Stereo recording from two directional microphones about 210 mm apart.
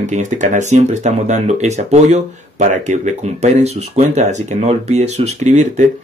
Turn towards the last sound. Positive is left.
turn(degrees=-35)  # may be behind; listen again after turning